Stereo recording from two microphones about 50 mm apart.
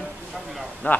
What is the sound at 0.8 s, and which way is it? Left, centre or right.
Speech, left.